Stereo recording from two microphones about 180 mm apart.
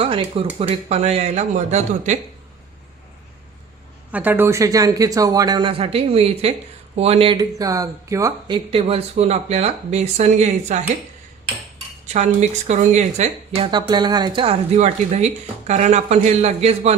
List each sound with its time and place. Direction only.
0.0 s speech: 30° right (ahead or behind)
4.1 s speech: 10° right (ahead or behind); by 10.8 s 40° right (ahead or behind)
12.0 s speech: 40° right (ahead or behind)
13.7 s speech: 25° right (ahead or behind)